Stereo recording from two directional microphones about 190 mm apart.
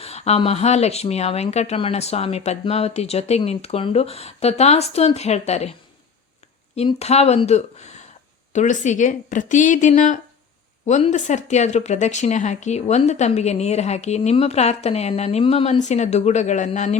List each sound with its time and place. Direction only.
0.0 s speech: 35° left (ahead or behind)
6.7 s speech: 35° left (ahead or behind)